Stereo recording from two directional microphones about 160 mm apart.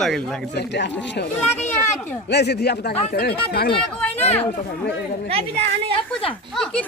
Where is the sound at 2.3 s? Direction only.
90° left.